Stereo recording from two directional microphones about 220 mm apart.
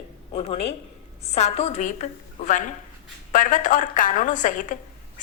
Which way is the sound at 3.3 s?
35° left (ahead or behind).